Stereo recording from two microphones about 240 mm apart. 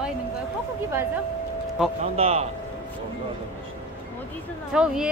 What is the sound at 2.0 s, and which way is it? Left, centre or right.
Speech, right.